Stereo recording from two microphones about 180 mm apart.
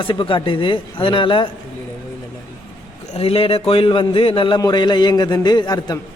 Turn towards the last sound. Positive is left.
turn(degrees=25)  # may be behind; listen again after turning